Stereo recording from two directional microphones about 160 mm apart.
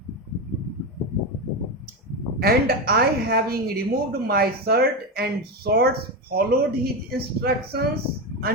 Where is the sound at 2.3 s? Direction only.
70° right (ahead or behind).